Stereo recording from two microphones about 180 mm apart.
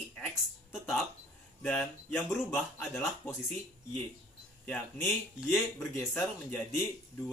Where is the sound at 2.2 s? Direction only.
15° left (ahead or behind).